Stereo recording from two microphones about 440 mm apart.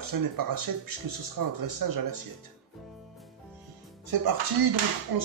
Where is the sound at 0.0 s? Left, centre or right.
Right.